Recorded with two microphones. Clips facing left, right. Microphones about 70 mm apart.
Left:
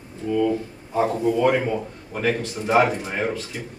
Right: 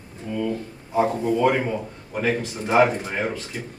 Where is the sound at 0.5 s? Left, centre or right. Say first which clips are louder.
Even; centre.